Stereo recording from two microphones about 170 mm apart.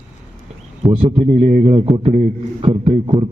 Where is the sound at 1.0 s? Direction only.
40° right (ahead or behind).